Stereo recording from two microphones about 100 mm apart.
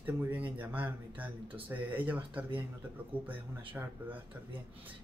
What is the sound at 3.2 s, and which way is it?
Speech, 20° right (ahead or behind).